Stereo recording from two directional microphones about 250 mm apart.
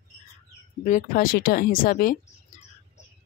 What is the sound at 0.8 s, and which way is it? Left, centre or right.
Speech, left.